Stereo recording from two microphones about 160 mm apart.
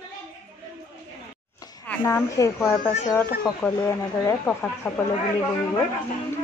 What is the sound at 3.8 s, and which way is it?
A woman's voice, 20° left (ahead or behind).